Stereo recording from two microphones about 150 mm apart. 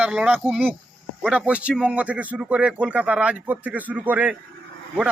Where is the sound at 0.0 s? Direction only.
10° right (ahead or behind).